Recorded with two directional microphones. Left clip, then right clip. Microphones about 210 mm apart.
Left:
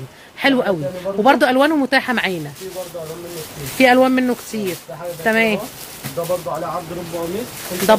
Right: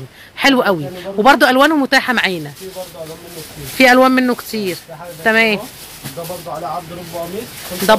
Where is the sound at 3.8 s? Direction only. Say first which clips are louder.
Right 3 dB; 10° right (ahead or behind).